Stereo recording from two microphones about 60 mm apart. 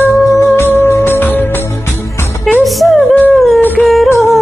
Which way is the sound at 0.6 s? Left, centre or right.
Left.